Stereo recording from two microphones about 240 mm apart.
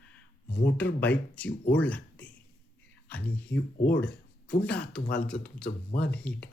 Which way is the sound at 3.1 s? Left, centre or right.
Centre.